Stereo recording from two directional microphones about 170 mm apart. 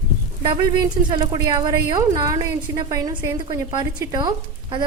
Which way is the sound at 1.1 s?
25° right (ahead or behind).